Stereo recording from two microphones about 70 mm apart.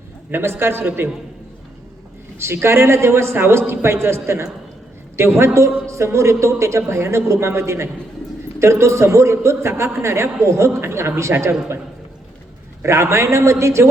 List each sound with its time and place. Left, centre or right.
0.3 s a man's voice: right
2.4 s a man's voice: right
12.8 s speech: right